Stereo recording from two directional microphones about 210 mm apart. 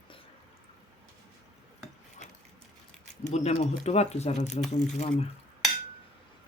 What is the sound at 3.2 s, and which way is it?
Speech, 30° left (ahead or behind).